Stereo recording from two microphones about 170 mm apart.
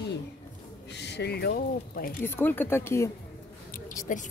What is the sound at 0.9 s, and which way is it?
Speech, 80° left.